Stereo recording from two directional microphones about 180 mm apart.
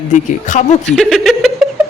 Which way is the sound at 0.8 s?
Centre (ahead or behind).